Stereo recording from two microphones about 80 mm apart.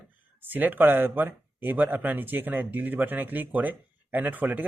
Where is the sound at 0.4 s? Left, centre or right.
Right.